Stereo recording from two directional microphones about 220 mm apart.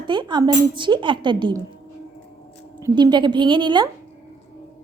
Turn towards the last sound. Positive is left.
turn(degrees=-20)  # may be behind; listen again after turning